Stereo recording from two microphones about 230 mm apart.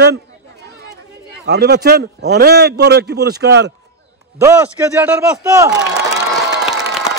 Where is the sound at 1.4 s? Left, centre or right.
Right.